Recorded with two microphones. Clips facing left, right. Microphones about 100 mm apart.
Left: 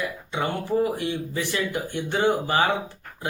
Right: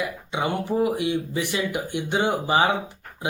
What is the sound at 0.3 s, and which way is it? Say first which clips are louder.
Speech: right 1 dB; 15° right (ahead or behind).